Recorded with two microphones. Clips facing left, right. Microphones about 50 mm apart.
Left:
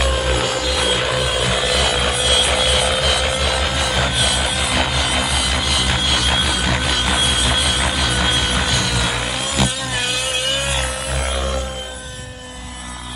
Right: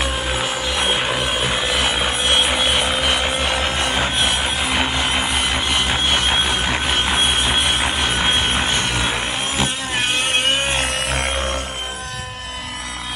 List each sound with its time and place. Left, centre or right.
0.0 s music: centre; by 10.2 s right
10.2 s vehicle: right
10.9 s music: right
11.2 s a sound: right